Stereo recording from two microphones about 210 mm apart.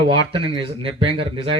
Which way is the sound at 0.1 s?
25° right (ahead or behind).